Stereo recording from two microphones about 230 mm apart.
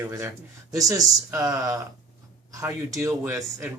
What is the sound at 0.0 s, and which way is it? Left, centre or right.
Speech, centre.